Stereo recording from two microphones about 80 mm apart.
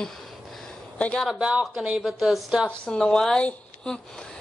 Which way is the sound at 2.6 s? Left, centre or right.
Centre.